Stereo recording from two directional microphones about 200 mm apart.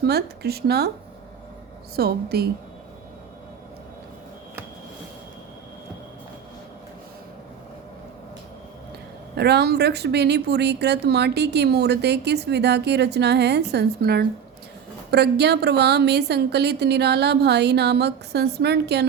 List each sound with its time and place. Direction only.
0.0 s speech: 50° right (ahead or behind)
2.0 s speech: 50° right (ahead or behind)
9.3 s speech: 55° right (ahead or behind)